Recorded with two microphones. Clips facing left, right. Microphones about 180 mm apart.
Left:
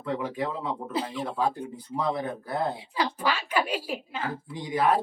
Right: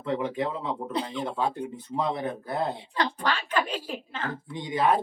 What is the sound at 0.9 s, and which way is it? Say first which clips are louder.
Speech: even; 5° left (ahead or behind).